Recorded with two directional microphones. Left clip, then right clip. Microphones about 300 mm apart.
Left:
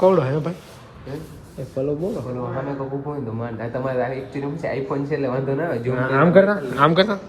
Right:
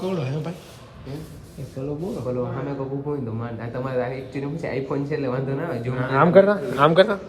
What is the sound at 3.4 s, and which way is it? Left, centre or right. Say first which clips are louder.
Speech: left 4 dB; left.